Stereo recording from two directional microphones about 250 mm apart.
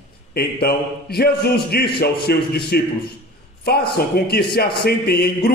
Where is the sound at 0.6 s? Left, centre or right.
Left.